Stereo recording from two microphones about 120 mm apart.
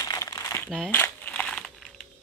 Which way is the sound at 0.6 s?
Centre (ahead or behind).